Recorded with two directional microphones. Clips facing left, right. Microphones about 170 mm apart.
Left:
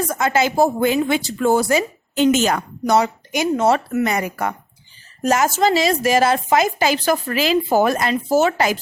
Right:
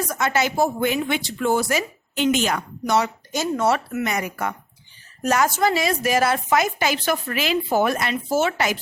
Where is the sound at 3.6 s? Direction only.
35° left (ahead or behind).